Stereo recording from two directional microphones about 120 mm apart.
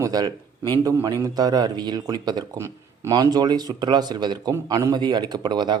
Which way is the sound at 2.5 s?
25° right (ahead or behind).